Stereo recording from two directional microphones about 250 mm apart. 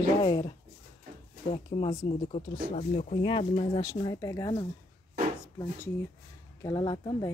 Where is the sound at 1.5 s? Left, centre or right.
Left.